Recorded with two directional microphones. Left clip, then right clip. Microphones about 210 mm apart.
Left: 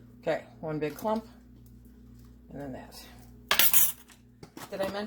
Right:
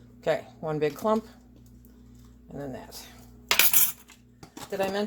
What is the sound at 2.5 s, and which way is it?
Speech, 45° right (ahead or behind).